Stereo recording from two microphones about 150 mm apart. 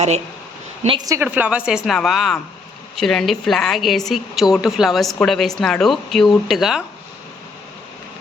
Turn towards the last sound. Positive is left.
turn(degrees=0)  # may be behind; listen again after turning